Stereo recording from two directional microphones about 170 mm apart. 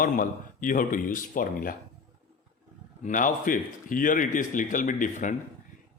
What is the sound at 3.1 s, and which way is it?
Speech, 50° left (ahead or behind).